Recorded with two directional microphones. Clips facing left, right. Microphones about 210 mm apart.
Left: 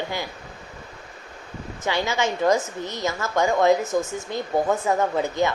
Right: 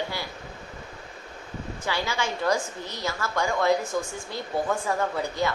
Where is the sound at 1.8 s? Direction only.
25° left (ahead or behind).